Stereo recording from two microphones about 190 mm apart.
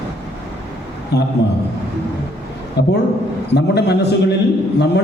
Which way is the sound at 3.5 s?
60° left (ahead or behind).